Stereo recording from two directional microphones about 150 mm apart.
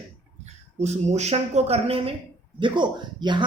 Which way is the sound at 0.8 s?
50° right (ahead or behind).